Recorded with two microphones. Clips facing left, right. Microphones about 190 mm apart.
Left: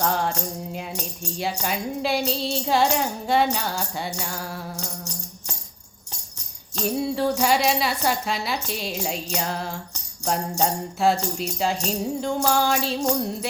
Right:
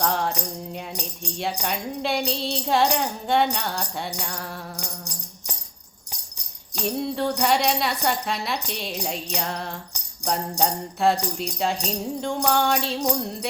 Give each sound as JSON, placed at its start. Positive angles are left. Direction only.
{"t": 0.0, "sound": "music", "side_deg": 0}
{"t": 1.2, "sound": "speech", "side_deg": 0}
{"t": 4.8, "sound": "music", "side_deg": -15}
{"t": 6.8, "sound": "speech", "side_deg": 0}